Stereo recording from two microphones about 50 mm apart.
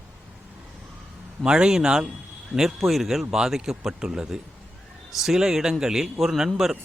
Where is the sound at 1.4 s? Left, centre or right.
Centre.